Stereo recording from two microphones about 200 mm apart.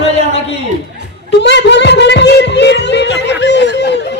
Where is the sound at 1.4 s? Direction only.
60° left (ahead or behind).